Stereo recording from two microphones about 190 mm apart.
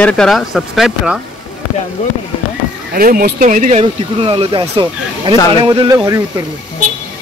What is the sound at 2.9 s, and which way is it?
Speech, 50° right (ahead or behind).